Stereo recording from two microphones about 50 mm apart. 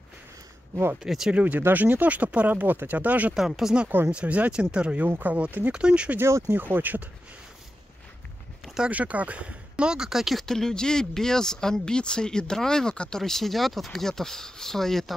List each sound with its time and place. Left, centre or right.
1.0 s speech: centre
1.3 s speech: right
3.3 s speech: centre
4.1 s speech: right
5.2 s speech: right
5.7 s speech: right
6.4 s speech: right
8.9 s speech: right
9.8 s speech: centre
10.4 s speech: centre
13.2 s speech: centre